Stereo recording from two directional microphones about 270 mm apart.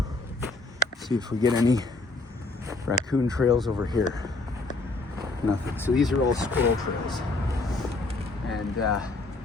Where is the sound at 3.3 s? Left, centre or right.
Centre.